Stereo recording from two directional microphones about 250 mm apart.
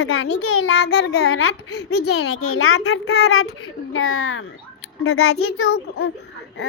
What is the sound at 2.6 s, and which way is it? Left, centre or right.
A child's voice, left.